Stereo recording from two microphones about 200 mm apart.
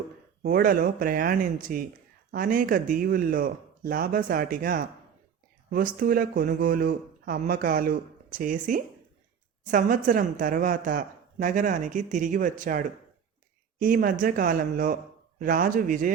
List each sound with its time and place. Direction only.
0.4 s speech: 45° right (ahead or behind)